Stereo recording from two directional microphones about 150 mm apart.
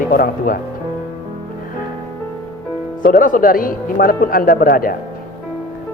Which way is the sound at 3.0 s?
65° left (ahead or behind).